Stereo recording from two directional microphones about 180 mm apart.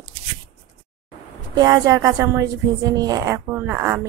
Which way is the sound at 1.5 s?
20° right (ahead or behind).